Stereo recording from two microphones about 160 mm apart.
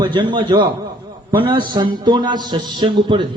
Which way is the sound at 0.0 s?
30° right (ahead or behind).